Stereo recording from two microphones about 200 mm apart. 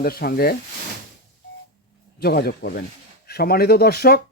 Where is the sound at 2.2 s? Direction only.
50° left (ahead or behind).